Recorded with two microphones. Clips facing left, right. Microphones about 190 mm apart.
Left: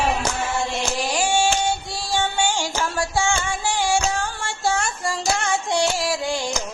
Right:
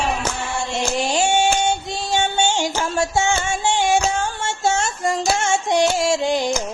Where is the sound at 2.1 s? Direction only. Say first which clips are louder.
Right 2 dB; 25° right (ahead or behind).